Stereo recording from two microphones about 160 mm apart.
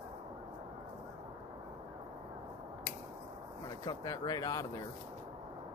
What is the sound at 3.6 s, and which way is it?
Speech, 25° left (ahead or behind).